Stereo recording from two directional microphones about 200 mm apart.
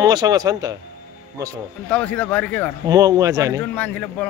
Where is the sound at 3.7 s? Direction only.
5° left (ahead or behind).